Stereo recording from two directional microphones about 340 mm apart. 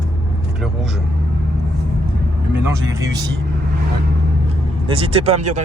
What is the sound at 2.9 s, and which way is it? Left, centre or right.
Speech, centre.